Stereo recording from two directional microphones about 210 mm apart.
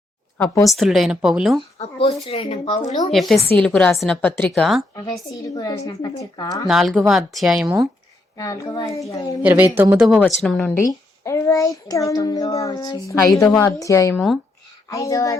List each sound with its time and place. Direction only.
0.3 s a child's voice: 10° left (ahead or behind)
0.7 s a woman's voice: centre (ahead or behind)
1.8 s speech: 25° left (ahead or behind)
3.1 s a woman's voice: centre (ahead or behind)
5.3 s a child's voice: 15° left (ahead or behind)
6.7 s a woman's voice: centre (ahead or behind)
8.4 s a child's voice: 15° left (ahead or behind)
9.4 s a woman's voice: 10° right (ahead or behind)
10.1 s a woman's voice: 5° left (ahead or behind)